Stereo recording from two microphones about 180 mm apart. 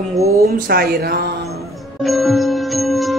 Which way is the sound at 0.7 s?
60° right (ahead or behind).